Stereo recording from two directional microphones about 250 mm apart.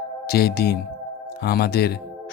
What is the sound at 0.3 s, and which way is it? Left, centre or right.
Speech, left.